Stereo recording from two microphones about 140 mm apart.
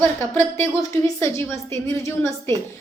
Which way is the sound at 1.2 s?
20° left (ahead or behind).